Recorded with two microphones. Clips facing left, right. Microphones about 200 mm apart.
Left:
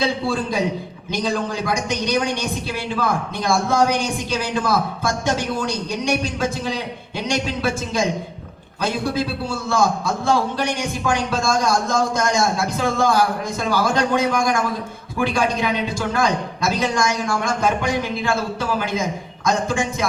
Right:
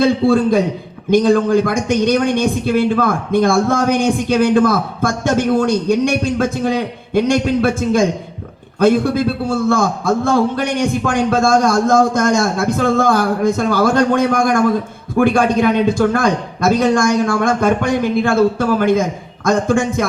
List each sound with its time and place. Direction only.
0.0 s a man's voice: 55° right (ahead or behind)